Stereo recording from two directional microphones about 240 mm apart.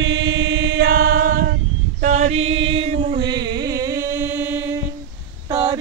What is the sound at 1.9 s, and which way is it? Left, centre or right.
Chant, right.